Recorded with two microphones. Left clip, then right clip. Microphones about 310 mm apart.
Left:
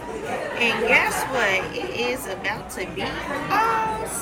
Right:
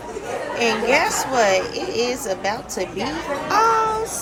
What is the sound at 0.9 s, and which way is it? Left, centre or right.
Speech, centre.